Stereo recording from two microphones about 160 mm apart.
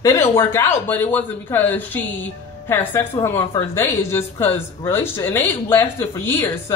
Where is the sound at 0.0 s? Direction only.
20° left (ahead or behind).